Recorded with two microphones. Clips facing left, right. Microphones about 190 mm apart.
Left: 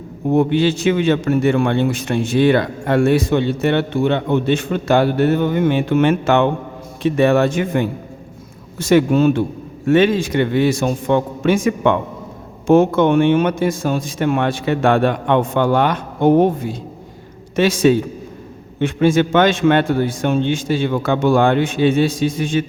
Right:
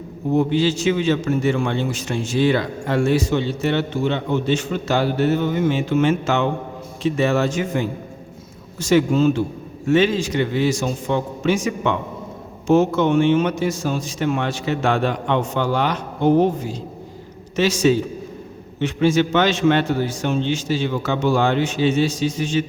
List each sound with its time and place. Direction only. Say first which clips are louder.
0.3 s a man's voice: left 3 dB; 60° left (ahead or behind)